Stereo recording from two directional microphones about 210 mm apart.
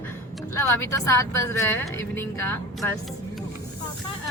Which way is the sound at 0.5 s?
15° left (ahead or behind).